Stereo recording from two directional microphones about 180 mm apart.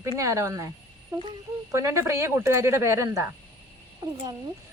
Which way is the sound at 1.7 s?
15° right (ahead or behind).